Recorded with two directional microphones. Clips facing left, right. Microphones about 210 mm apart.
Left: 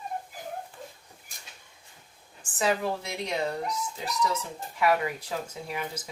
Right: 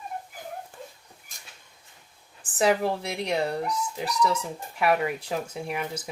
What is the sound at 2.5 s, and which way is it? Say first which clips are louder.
A woman's voice: right 4 dB; 30° right (ahead or behind).